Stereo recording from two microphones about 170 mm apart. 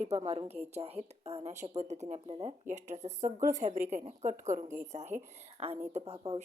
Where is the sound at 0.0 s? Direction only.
40° right (ahead or behind).